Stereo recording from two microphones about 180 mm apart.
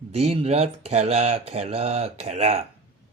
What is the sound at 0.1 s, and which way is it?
Speech, 35° right (ahead or behind).